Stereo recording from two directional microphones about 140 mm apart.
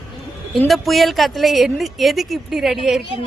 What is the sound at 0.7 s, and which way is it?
A woman's voice, centre (ahead or behind).